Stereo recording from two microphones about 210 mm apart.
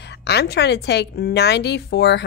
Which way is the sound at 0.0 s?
50° left (ahead or behind).